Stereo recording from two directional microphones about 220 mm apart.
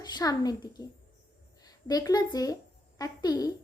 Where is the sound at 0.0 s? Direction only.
20° left (ahead or behind).